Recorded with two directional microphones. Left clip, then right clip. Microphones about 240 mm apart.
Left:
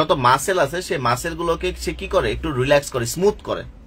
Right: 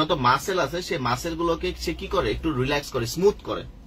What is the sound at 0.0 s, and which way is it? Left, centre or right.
Speech, left.